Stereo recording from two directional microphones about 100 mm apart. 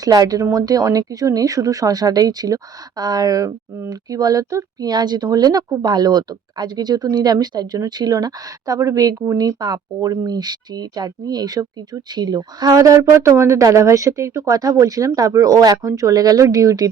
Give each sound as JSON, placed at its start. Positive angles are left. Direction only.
{"t": 0.0, "sound": "speech", "side_deg": -40}